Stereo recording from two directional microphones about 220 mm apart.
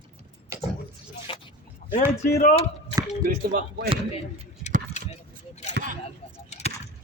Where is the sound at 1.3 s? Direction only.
25° left (ahead or behind).